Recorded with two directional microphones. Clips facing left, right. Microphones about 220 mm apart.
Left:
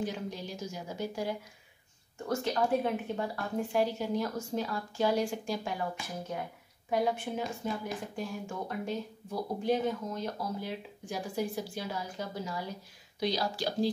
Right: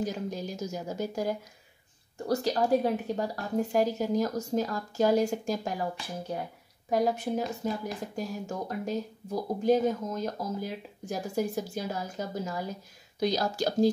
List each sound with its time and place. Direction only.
0.0 s speech: 40° right (ahead or behind)